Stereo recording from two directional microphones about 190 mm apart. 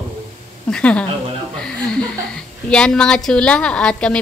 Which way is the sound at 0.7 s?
5° left (ahead or behind).